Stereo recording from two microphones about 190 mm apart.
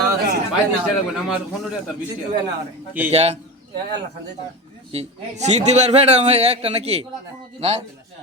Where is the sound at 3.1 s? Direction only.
35° right (ahead or behind).